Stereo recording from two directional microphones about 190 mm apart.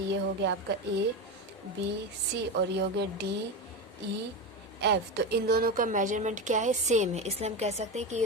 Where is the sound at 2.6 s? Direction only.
65° right (ahead or behind).